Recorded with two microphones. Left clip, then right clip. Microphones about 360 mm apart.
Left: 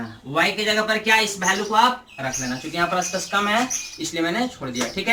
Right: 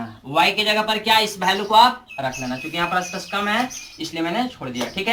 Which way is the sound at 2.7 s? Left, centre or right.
Centre.